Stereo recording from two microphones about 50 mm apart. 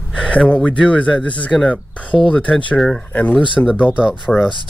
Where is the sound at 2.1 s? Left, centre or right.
Centre.